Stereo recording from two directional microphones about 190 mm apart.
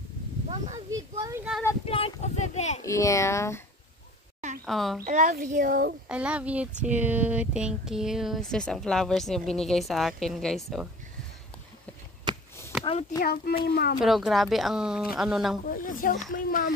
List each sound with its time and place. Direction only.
0.9 s speech: 15° right (ahead or behind)
1.9 s speech: 30° left (ahead or behind)
2.8 s speech: 15° left (ahead or behind)
4.6 s speech: centre (ahead or behind)
5.0 s a child's voice: 45° right (ahead or behind)
6.0 s speech: 5° right (ahead or behind)
12.3 s chop: 25° right (ahead or behind)
13.2 s speech: 55° left (ahead or behind)
14.0 s speech: centre (ahead or behind)
15.6 s speech: 45° left (ahead or behind)